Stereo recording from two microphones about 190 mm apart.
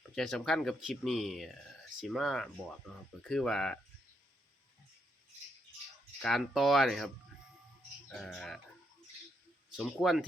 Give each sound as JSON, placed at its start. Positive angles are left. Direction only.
{"t": 0.2, "sound": "speech", "side_deg": 5}
{"t": 6.2, "sound": "speech", "side_deg": 0}
{"t": 8.1, "sound": "speech", "side_deg": 0}
{"t": 9.7, "sound": "speech", "side_deg": 0}